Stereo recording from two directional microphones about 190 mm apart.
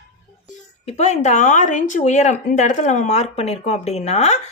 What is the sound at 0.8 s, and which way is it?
Speech, 35° left (ahead or behind).